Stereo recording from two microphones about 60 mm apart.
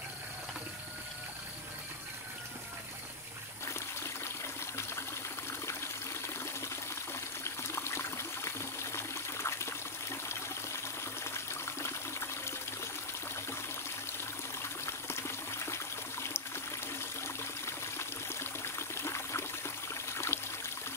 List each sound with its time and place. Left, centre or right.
3.6 s water: left
7.4 s trickle: left
10.8 s water: left
14.6 s pour: left